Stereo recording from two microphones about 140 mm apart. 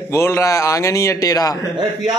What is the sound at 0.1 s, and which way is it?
A man's voice, 20° left (ahead or behind).